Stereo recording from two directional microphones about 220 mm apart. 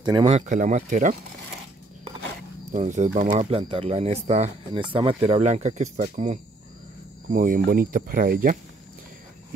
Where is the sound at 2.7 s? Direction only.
30° right (ahead or behind).